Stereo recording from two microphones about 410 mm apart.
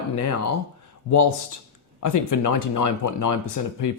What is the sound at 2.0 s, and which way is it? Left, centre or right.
Speech, left.